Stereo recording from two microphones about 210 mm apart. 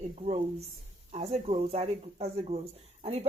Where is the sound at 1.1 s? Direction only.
30° right (ahead or behind).